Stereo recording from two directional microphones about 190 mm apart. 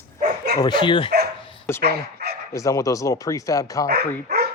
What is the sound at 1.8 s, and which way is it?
Speech, 55° right (ahead or behind).